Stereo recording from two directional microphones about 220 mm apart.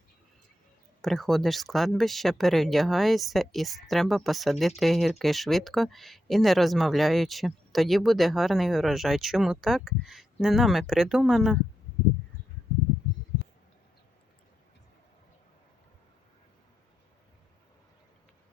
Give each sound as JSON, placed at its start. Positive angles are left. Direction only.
{"t": 1.0, "sound": "speech", "side_deg": 0}